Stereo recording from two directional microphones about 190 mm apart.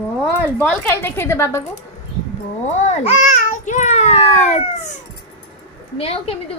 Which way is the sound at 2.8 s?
35° left (ahead or behind).